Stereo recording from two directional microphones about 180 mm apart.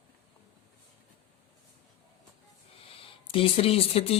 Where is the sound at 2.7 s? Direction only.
30° left (ahead or behind).